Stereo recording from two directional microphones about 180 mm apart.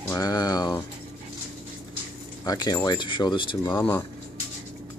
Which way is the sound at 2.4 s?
20° left (ahead or behind).